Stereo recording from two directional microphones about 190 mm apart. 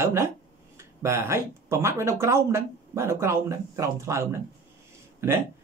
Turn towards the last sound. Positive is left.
turn(degrees=-15)  # may be behind; listen again after turning